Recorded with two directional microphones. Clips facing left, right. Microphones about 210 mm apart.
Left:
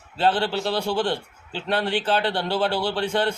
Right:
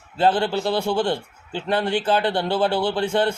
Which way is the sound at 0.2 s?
10° right (ahead or behind).